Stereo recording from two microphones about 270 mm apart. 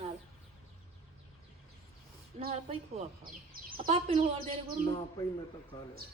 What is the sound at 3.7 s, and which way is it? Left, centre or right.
Speech, centre.